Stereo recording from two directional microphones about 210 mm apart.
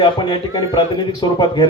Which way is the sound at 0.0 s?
20° left (ahead or behind).